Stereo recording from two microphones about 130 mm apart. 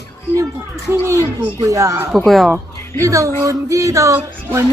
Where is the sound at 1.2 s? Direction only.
25° right (ahead or behind).